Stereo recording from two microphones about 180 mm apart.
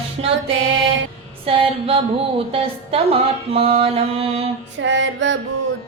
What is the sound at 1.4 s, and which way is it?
Mantra, 30° right (ahead or behind).